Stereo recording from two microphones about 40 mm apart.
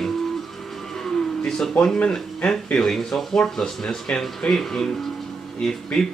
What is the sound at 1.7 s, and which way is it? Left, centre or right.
Speech, left.